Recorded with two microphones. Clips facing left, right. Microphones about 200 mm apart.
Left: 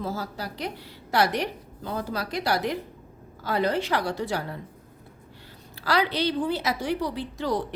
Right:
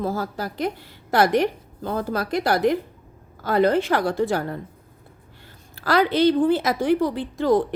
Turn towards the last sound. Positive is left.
turn(degrees=-50)  # may be behind; listen again after turning